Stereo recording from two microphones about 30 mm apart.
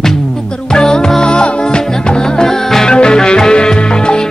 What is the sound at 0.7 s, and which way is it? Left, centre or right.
Music, left.